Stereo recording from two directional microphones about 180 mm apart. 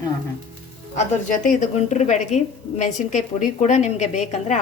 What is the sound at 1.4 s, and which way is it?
A woman's voice, 45° left (ahead or behind).